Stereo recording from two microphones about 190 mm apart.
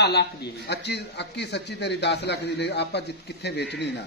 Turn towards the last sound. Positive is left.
turn(degrees=60)  # may be behind; listen again after turning